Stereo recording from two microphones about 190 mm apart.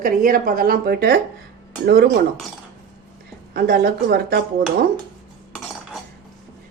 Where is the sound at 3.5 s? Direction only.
55° right (ahead or behind).